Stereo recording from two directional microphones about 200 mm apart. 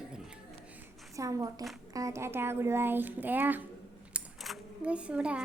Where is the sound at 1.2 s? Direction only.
15° right (ahead or behind).